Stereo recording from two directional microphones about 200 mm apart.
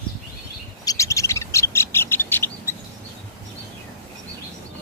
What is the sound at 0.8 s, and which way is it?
Bird, 15° left (ahead or behind).